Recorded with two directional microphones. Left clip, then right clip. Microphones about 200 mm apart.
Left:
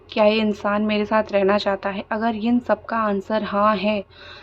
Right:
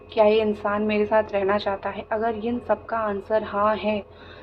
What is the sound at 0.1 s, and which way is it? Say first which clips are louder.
A woman's voice: left 1 dB; 45° left (ahead or behind).